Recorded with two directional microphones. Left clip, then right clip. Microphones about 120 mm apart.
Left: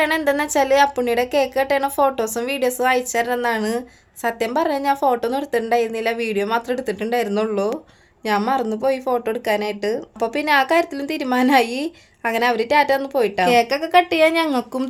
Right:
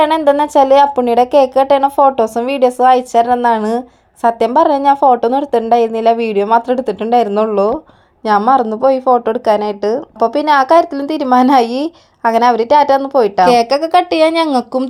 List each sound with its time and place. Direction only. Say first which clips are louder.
0.3 s a woman's voice: right 8 dB; 35° right (ahead or behind)
13.5 s speech: right 6 dB; 50° right (ahead or behind)